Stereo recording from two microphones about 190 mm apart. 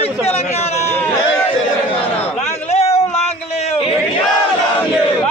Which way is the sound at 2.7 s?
35° left (ahead or behind).